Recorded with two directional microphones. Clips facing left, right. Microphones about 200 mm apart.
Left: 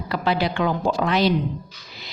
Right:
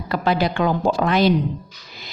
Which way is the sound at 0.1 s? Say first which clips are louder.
Right 2 dB; 45° right (ahead or behind).